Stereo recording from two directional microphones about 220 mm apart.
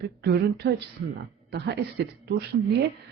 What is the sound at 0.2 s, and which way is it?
A woman's voice, 50° right (ahead or behind).